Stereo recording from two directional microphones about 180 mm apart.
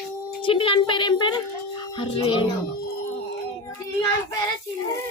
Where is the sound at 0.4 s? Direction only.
30° left (ahead or behind).